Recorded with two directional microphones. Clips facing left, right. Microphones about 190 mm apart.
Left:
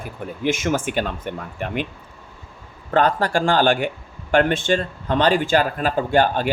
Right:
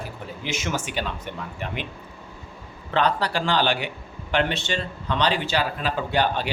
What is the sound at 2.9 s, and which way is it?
Speech, 45° left (ahead or behind).